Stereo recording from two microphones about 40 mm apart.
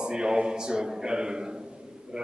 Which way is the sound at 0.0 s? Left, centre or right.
Centre.